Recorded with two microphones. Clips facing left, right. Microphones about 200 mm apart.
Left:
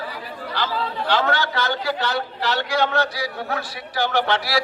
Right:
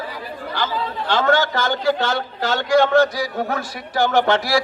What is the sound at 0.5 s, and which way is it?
Speech, 50° right (ahead or behind).